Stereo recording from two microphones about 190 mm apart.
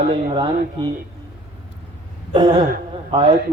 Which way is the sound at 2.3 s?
25° right (ahead or behind).